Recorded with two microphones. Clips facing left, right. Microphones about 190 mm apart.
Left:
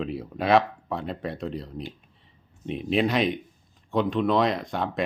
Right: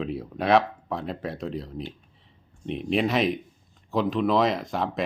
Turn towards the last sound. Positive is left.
turn(degrees=0)  # may be behind; listen again after turning